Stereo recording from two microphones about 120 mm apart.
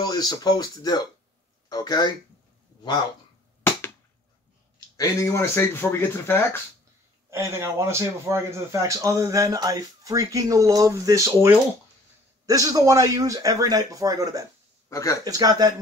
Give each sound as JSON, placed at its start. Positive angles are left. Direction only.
{"t": 0.0, "sound": "speech", "side_deg": 35}
{"t": 4.7, "sound": "speech", "side_deg": 30}
{"t": 7.2, "sound": "speech", "side_deg": -25}
{"t": 14.9, "sound": "speech", "side_deg": 25}
{"t": 15.2, "sound": "speech", "side_deg": -30}